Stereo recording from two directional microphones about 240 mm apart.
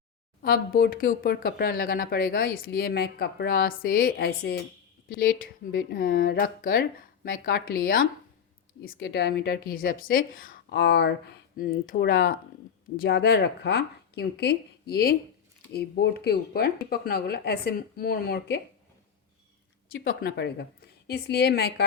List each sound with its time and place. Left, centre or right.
0.4 s speech: left
19.9 s speech: left